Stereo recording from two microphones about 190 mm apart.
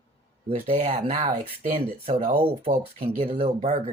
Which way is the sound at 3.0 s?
50° right (ahead or behind).